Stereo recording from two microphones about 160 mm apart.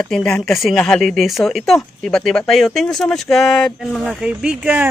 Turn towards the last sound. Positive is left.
turn(degrees=-10)  # may be behind; listen again after turning